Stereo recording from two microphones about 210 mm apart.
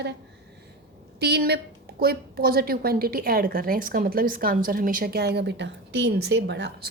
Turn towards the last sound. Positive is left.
turn(degrees=-55)  # may be behind; listen again after turning